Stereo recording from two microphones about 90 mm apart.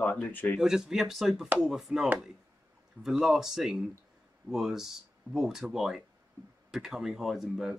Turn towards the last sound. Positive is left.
turn(degrees=-5)  # may be behind; listen again after turning